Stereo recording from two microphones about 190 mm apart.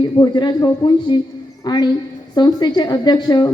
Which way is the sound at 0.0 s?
25° left (ahead or behind).